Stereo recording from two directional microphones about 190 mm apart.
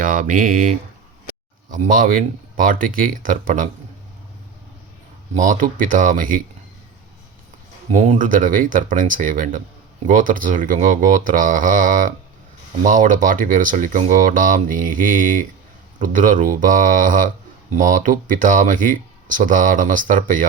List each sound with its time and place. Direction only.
0.0 s speech: 45° right (ahead or behind)
1.7 s speech: 45° right (ahead or behind)
5.3 s speech: 40° right (ahead or behind)
7.9 s speech: 40° right (ahead or behind)